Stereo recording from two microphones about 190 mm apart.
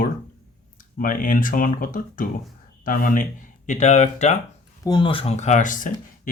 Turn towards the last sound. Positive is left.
turn(degrees=45)  # may be behind; listen again after turning